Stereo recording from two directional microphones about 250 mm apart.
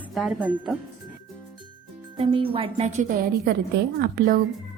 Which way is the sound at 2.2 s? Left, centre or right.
Right.